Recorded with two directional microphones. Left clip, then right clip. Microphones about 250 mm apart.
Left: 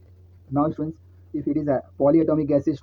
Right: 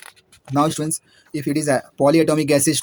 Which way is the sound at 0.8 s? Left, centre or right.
Right.